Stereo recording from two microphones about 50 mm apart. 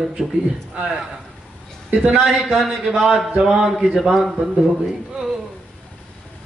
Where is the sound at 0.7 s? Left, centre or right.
Right.